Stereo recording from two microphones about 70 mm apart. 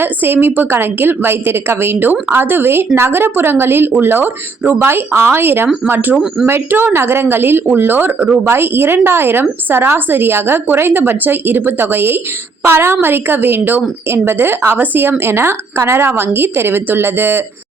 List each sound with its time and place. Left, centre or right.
0.0 s a woman's voice: right